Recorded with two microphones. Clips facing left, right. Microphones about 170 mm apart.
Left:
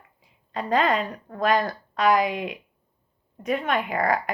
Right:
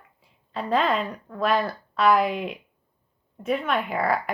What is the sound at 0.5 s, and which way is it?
A woman's voice, 40° left (ahead or behind).